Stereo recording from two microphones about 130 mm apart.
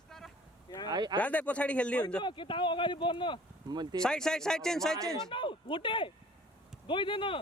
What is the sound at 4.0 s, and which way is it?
Speech, 5° left (ahead or behind).